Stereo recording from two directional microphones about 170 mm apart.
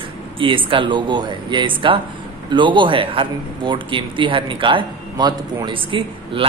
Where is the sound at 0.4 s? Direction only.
30° right (ahead or behind).